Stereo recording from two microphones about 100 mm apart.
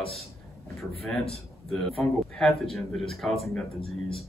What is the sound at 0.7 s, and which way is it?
A man's voice, 5° left (ahead or behind).